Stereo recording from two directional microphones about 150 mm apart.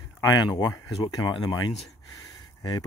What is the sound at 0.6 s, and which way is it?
Speech, 25° left (ahead or behind).